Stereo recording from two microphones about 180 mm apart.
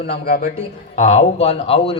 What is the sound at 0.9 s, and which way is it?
A man's voice, 40° left (ahead or behind).